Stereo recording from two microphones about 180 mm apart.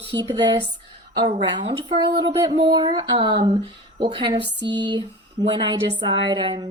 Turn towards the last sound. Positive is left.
turn(degrees=-25)  # may be behind; listen again after turning